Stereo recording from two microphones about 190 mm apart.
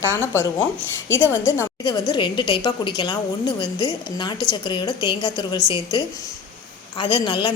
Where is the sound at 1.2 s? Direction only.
15° left (ahead or behind).